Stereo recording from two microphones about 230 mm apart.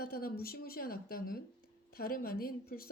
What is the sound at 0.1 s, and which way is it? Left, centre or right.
Speech, left.